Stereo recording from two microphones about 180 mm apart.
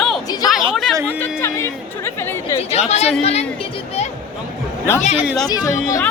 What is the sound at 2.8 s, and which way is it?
Speech, 35° left (ahead or behind).